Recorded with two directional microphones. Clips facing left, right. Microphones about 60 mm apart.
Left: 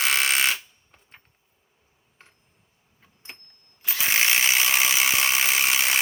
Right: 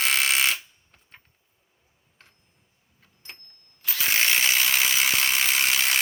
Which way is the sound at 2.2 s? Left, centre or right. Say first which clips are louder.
Left 2 dB; left.